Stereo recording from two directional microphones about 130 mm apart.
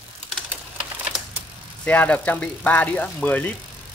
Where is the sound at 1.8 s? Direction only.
10° left (ahead or behind).